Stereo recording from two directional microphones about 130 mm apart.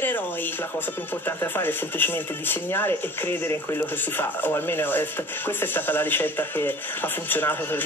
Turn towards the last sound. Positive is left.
turn(degrees=15)  # may be behind; listen again after turning